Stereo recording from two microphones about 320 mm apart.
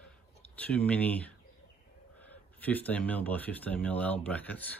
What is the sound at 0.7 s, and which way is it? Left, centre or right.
Speech, centre.